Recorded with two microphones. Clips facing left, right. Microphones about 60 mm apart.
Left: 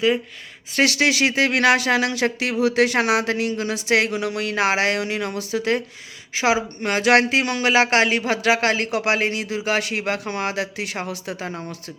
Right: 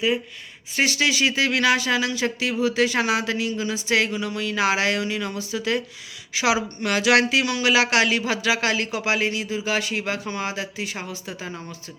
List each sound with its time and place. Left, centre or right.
0.7 s speech: left
6.3 s a woman's voice: left